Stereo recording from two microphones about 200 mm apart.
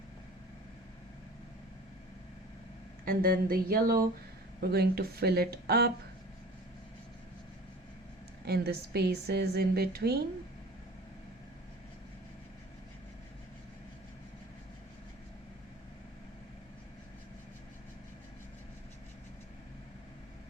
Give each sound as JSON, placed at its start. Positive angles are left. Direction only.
{"t": 3.0, "sound": "a woman's voice", "side_deg": -45}
{"t": 8.4, "sound": "a woman's voice", "side_deg": -50}